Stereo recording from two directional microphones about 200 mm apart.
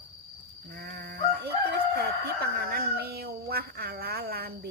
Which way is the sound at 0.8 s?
55° right (ahead or behind).